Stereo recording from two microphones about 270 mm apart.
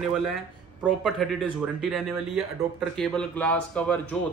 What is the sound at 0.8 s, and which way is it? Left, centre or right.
Speech, centre.